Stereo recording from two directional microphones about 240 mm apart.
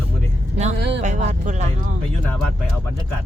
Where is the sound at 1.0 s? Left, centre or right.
Right.